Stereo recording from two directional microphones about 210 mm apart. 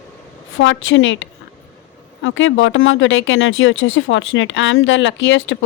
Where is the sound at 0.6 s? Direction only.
65° left (ahead or behind).